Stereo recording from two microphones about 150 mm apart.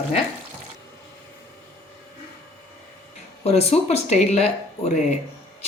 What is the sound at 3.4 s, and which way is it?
A woman's voice, 45° left (ahead or behind).